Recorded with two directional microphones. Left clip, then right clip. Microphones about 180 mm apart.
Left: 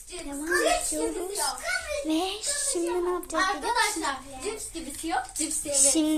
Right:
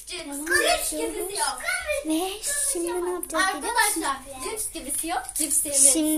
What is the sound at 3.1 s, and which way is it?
Speech, centre (ahead or behind).